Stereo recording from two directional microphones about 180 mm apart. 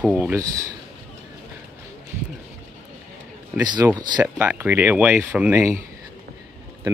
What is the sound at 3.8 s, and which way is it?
Speech, 10° right (ahead or behind).